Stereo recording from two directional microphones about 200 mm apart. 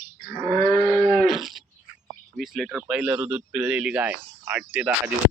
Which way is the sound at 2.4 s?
Centre (ahead or behind).